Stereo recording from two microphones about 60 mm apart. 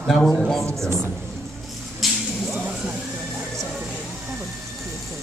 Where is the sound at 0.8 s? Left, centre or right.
Right.